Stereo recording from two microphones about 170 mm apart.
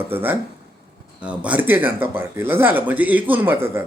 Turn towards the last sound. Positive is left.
turn(degrees=-15)  # may be behind; listen again after turning